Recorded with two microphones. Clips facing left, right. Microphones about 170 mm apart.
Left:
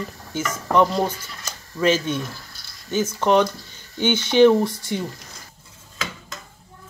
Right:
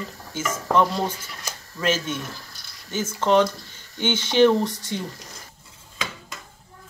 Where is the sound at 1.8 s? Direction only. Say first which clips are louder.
Left 5 dB; 15° left (ahead or behind).